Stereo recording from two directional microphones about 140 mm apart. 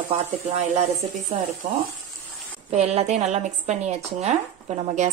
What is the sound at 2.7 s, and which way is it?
A woman's voice, 50° right (ahead or behind).